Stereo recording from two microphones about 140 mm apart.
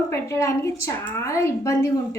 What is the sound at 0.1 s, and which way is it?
A woman's voice, 20° left (ahead or behind).